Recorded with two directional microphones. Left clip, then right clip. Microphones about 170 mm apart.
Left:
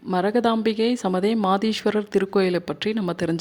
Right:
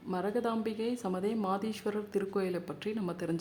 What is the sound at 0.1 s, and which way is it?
Speech, 40° left (ahead or behind).